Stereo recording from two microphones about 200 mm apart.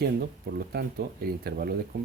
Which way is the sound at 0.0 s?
50° right (ahead or behind).